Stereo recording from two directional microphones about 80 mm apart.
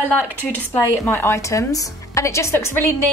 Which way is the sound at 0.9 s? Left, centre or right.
Left.